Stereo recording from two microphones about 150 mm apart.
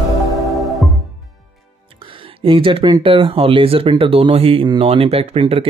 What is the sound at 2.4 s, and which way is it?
Speech, 35° right (ahead or behind).